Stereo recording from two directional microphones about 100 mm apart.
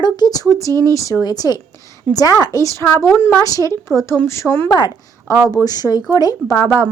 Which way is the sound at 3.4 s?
35° left (ahead or behind).